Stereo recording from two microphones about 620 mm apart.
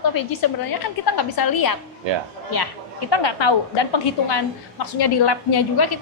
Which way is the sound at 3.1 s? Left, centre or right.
Left.